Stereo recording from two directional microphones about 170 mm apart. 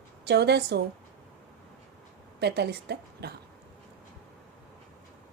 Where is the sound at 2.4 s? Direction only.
80° right.